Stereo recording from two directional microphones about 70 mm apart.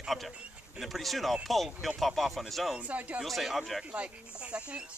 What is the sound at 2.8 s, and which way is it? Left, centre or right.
Speech, centre.